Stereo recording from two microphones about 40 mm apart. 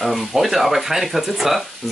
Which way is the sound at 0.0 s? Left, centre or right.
Centre.